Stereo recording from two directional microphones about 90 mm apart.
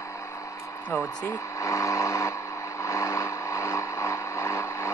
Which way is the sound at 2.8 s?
35° left (ahead or behind).